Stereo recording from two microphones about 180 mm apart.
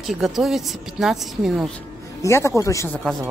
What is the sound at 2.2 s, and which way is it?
Speech, 15° left (ahead or behind).